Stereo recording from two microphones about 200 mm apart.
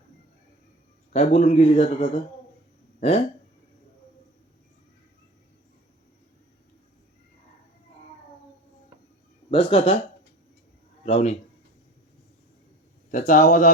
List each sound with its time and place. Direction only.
1.1 s speech: 35° left (ahead or behind)
9.5 s speech: 30° left (ahead or behind)
11.0 s speech: 35° left (ahead or behind)
13.1 s speech: 40° left (ahead or behind)